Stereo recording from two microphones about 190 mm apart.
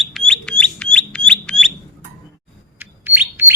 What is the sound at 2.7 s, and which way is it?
Bird, 10° right (ahead or behind).